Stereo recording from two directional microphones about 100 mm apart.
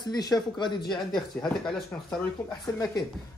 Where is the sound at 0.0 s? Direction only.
40° left (ahead or behind).